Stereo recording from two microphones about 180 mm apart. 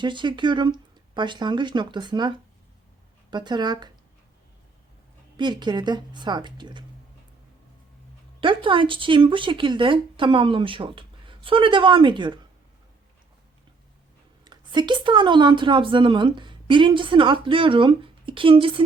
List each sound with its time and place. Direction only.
0.0 s speech: 25° right (ahead or behind)
5.4 s speech: 25° right (ahead or behind)
8.4 s speech: 30° right (ahead or behind)
14.4 s speech: 25° right (ahead or behind)